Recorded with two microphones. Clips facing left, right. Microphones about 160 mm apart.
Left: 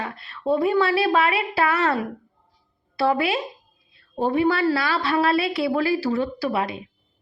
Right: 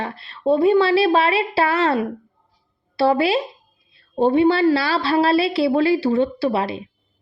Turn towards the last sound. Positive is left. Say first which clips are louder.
# right 4 dB
turn(degrees=-30)  # may be behind; listen again after turning